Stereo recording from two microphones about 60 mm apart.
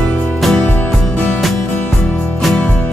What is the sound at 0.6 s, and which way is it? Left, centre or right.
Music, left.